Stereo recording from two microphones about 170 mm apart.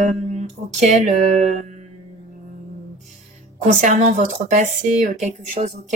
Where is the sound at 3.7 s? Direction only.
45° right (ahead or behind).